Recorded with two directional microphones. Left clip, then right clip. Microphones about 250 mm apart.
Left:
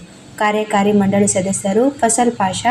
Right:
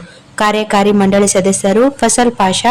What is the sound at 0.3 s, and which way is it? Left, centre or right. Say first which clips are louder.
A woman's voice: right 4 dB; right.